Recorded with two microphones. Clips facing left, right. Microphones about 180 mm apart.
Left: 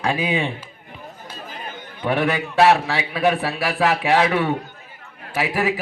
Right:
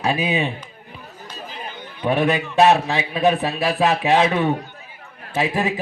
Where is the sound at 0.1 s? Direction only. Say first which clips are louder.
Right 1 dB; 20° right (ahead or behind).